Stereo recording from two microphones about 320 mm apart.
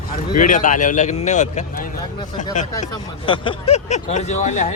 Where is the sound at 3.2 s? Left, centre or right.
Centre.